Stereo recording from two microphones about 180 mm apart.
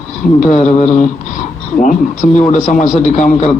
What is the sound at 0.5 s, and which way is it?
A man's voice, 40° left (ahead or behind).